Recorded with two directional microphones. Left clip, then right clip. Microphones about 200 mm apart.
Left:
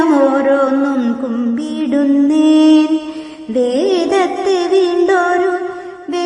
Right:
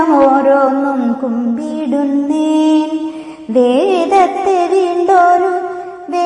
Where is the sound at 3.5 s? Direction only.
Centre (ahead or behind).